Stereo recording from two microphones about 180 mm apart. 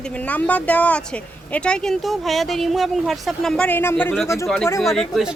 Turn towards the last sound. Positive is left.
turn(degrees=0)  # may be behind; listen again after turning